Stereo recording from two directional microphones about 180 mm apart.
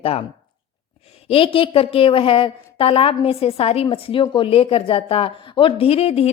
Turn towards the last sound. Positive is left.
turn(degrees=35)  # may be behind; listen again after turning